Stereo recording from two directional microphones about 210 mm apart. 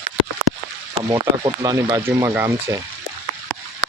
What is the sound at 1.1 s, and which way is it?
Speech, 20° right (ahead or behind).